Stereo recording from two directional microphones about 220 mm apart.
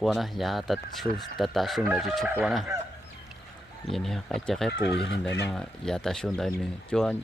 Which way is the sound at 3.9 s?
Centre (ahead or behind).